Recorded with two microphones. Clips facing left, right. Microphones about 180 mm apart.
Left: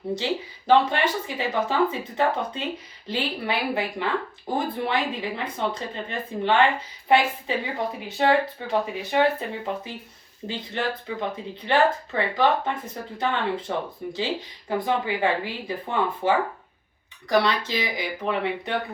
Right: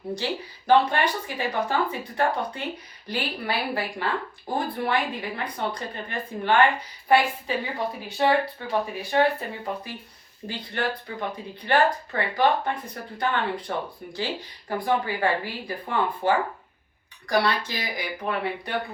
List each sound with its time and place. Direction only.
0.2 s speech: 20° left (ahead or behind)
17.2 s speech: 20° left (ahead or behind)